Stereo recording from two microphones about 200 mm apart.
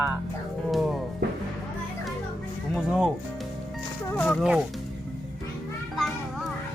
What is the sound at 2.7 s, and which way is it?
Speech, centre (ahead or behind).